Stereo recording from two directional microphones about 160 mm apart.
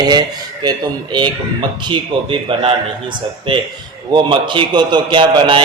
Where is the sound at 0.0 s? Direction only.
25° right (ahead or behind).